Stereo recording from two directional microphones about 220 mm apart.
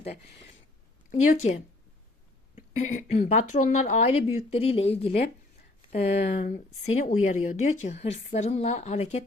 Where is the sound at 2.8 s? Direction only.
35° left (ahead or behind).